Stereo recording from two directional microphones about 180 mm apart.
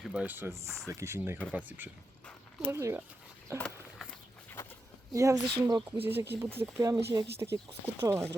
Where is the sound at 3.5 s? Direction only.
5° left (ahead or behind).